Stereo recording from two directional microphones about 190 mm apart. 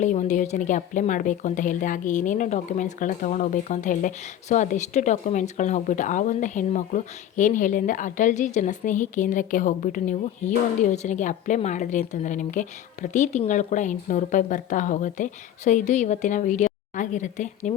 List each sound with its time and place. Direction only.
0.0 s a woman's voice: 40° left (ahead or behind)